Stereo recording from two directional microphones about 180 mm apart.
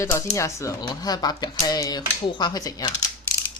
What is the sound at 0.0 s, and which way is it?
Speech, 15° left (ahead or behind).